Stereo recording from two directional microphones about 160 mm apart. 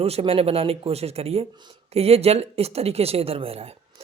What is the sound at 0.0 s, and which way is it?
Speech, 40° right (ahead or behind).